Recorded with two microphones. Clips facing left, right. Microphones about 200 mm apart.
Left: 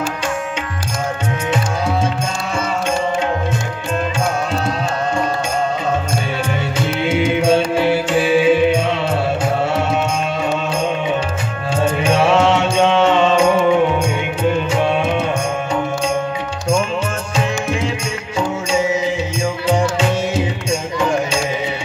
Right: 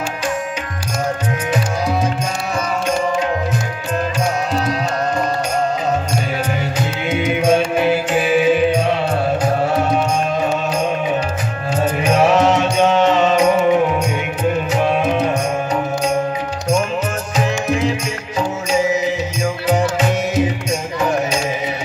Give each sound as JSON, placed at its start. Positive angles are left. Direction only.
{"t": 7.2, "sound": "music", "side_deg": 30}
{"t": 11.7, "sound": "mantra", "side_deg": 30}
{"t": 13.7, "sound": "music", "side_deg": 30}
{"t": 17.4, "sound": "music", "side_deg": 30}